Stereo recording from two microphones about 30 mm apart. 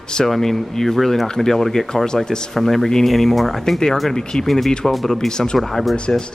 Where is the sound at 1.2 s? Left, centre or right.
Centre.